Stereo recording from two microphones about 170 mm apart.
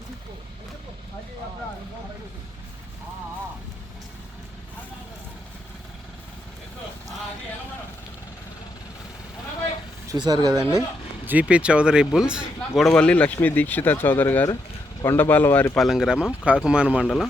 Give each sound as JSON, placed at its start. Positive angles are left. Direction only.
{"t": 10.1, "sound": "speech", "side_deg": -25}
{"t": 11.3, "sound": "speech", "side_deg": -10}